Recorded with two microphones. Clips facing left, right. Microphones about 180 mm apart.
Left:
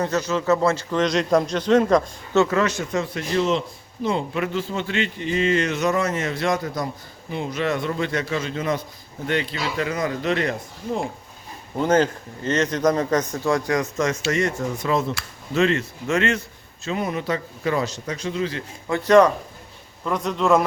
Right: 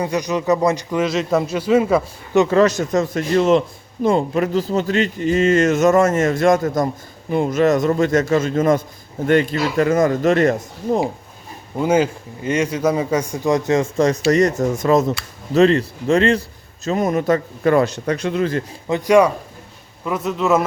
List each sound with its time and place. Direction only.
0.0 s a man's voice: 15° right (ahead or behind)
2.5 s a man's voice: 35° right (ahead or behind)
11.8 s a man's voice: 10° right (ahead or behind); by 18.6 s 55° right (ahead or behind)
18.9 s a man's voice: 15° right (ahead or behind)